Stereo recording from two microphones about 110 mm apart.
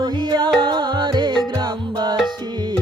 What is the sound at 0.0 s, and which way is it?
Music, 40° right (ahead or behind).